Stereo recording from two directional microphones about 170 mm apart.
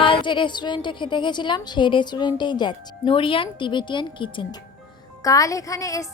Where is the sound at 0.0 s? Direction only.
30° left (ahead or behind).